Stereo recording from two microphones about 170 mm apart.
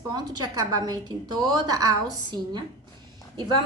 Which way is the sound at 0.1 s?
20° right (ahead or behind).